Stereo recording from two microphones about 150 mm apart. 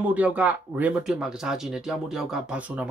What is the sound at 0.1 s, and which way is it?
Speech, 10° right (ahead or behind).